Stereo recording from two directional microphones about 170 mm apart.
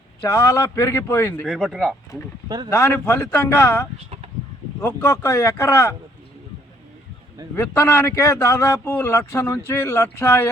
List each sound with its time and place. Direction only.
0.2 s a man's voice: 15° left (ahead or behind); by 2.0 s centre (ahead or behind)
2.6 s a man's voice: 15° left (ahead or behind)
3.9 s chicken: 40° right (ahead or behind)
4.8 s a man's voice: 15° left (ahead or behind)
7.5 s a man's voice: 15° left (ahead or behind)